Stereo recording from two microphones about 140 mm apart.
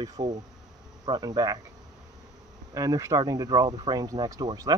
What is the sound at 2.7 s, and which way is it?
Speech, 25° right (ahead or behind).